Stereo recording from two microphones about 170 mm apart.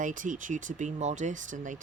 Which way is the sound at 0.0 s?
50° right (ahead or behind).